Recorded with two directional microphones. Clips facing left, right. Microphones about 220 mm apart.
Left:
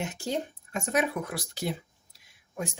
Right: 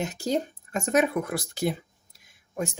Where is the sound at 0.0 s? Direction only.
40° right (ahead or behind).